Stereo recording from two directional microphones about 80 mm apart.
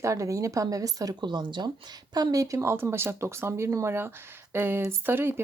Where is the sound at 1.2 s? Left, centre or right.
Right.